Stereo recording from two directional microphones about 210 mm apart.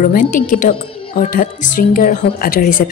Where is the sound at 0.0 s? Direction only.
40° left (ahead or behind).